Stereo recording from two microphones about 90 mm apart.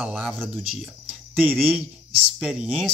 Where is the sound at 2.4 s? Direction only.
10° right (ahead or behind).